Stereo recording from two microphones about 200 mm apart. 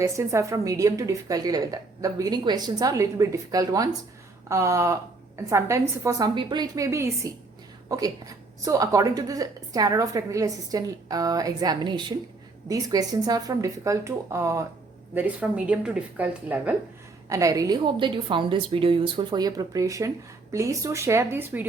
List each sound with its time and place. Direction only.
0.0 s a woman's voice: 15° right (ahead or behind)